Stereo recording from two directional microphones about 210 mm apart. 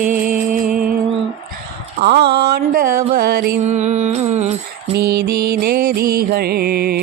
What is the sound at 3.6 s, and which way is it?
Music, 35° right (ahead or behind).